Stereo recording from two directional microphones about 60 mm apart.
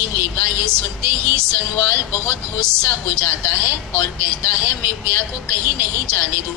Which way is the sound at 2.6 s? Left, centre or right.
Right.